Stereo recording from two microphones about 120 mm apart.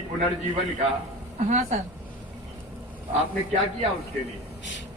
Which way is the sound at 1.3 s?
80° right.